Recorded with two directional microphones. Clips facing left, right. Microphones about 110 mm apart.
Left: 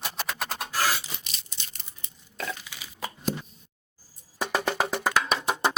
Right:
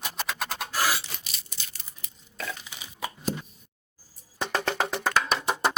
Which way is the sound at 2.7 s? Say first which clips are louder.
Right 1 dB; 20° right (ahead or behind).